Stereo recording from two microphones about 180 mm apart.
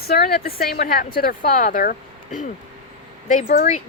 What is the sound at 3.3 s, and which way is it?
Speech, 45° left (ahead or behind).